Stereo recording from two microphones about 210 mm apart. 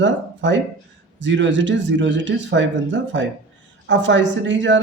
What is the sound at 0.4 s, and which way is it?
Speech, 60° right (ahead or behind).